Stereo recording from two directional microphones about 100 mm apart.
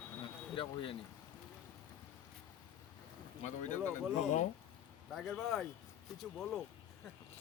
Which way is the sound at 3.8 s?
25° right (ahead or behind).